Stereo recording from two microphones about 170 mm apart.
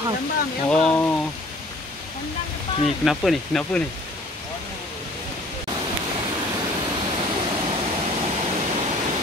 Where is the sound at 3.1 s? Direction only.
Centre (ahead or behind).